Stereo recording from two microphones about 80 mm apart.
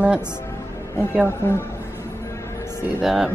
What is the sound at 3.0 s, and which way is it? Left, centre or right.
Speech, centre.